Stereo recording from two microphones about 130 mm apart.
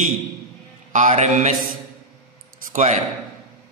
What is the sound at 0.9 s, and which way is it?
Mantra, 65° right (ahead or behind).